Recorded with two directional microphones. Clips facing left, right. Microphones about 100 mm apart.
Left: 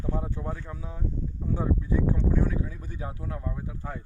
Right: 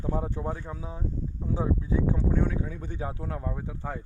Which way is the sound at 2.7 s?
30° right (ahead or behind).